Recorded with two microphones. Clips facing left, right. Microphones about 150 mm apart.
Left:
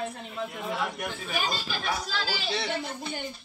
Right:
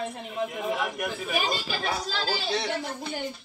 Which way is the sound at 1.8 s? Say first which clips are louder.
Right 1 dB; 45° right (ahead or behind).